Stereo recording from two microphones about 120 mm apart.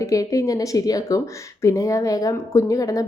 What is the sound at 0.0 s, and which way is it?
A woman's voice, 25° left (ahead or behind).